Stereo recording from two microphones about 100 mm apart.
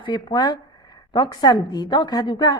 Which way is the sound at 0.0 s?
50° left (ahead or behind).